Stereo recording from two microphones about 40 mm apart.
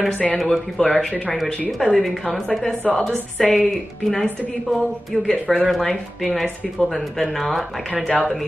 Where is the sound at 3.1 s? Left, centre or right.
Centre.